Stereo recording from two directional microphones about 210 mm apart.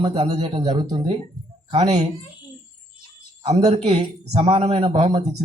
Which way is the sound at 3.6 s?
20° right (ahead or behind).